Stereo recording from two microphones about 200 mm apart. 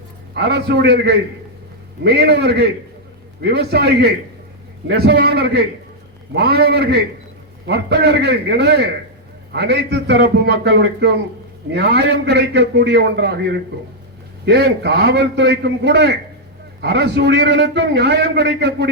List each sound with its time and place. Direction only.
0.3 s a man's voice: 55° right (ahead or behind)